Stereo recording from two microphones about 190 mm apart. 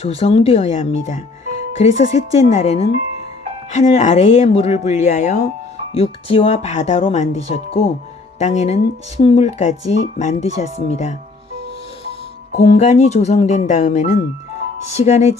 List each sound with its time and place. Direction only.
0.0 s speech: 30° left (ahead or behind)
12.5 s speech: 35° left (ahead or behind)